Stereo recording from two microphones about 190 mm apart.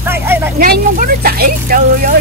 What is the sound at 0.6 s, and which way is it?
Speech, 50° right (ahead or behind).